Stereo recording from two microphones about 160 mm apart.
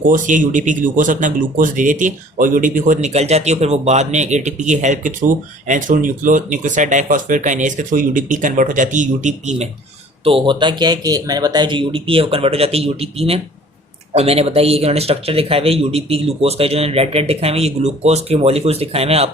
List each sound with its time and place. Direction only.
0.0 s speech: 55° right (ahead or behind)
10.2 s speech: 35° right (ahead or behind)